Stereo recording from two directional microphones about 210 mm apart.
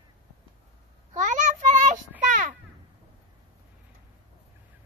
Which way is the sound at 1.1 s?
35° right (ahead or behind).